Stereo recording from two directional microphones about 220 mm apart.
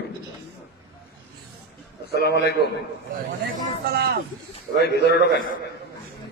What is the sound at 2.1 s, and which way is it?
Speech, 50° left (ahead or behind).